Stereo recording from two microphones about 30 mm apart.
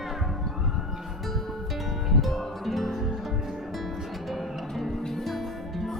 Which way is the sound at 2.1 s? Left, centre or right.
Centre.